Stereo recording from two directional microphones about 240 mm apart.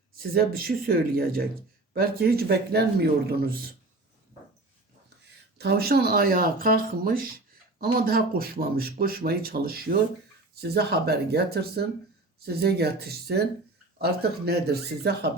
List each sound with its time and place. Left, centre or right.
0.2 s speech: right
5.5 s speech: right